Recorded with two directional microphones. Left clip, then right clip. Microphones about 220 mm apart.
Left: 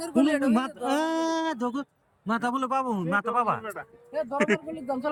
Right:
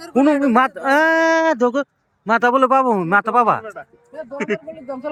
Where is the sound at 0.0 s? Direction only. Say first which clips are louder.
Right 8 dB; 5° left (ahead or behind).